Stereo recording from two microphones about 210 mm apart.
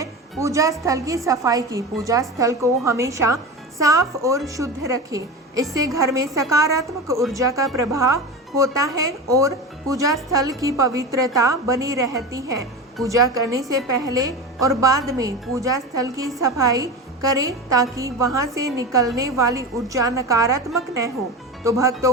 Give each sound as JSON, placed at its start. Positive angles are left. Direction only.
{"t": 0.0, "sound": "a woman's voice", "side_deg": -15}